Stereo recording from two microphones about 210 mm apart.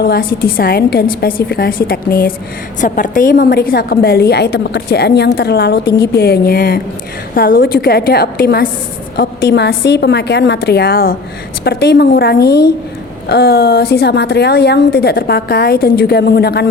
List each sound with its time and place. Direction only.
0.0 s a woman's voice: 45° left (ahead or behind)